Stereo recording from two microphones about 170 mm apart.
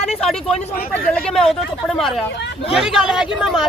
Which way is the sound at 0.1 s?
5° left (ahead or behind).